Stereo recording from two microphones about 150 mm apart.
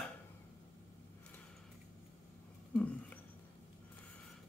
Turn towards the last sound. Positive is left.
turn(degrees=10)  # may be behind; listen again after turning